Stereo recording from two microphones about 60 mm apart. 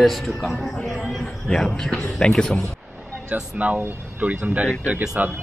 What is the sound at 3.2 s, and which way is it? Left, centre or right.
Speech, right.